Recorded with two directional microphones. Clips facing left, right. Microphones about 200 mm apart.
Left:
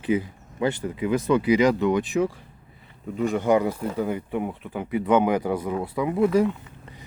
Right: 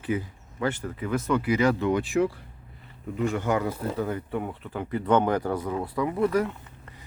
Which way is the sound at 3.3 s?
15° left (ahead or behind).